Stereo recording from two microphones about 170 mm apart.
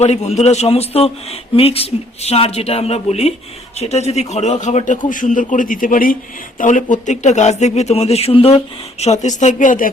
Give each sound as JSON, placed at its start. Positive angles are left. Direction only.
{"t": 0.0, "sound": "a man's voice", "side_deg": 40}